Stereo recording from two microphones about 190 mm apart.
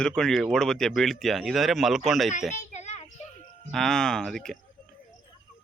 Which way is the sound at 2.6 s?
35° left (ahead or behind).